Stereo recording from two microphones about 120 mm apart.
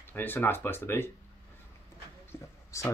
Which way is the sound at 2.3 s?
20° left (ahead or behind).